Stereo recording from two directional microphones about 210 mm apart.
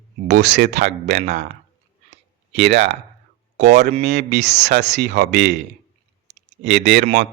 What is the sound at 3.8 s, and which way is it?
A man's voice, 50° right (ahead or behind).